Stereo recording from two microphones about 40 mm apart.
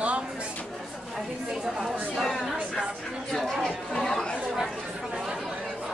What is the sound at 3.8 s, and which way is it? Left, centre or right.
Speech, centre.